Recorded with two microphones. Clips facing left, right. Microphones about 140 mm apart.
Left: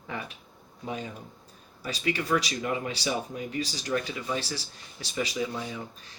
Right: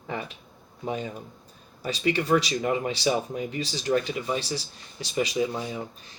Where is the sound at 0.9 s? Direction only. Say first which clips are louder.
Right 4 dB; 25° right (ahead or behind).